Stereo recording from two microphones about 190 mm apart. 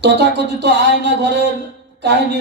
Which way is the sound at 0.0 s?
65° right (ahead or behind).